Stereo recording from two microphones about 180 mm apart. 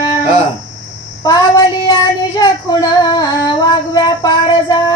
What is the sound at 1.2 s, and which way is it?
Child singing, 20° left (ahead or behind).